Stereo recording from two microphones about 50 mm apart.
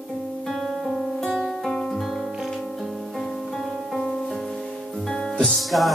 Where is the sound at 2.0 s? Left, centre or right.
Centre.